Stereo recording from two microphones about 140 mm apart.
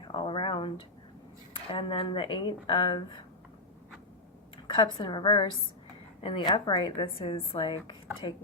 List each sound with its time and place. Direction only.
0.1 s speech: 40° left (ahead or behind)
4.6 s speech: 35° left (ahead or behind)